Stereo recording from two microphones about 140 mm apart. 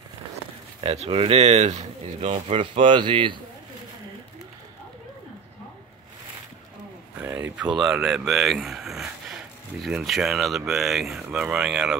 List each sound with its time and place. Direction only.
0.7 s speech: 45° right (ahead or behind)
7.2 s speech: 15° right (ahead or behind)